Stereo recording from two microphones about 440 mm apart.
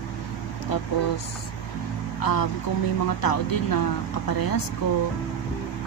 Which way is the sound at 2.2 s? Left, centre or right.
Left.